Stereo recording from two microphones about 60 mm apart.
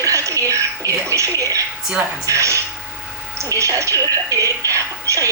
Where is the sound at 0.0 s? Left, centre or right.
Right.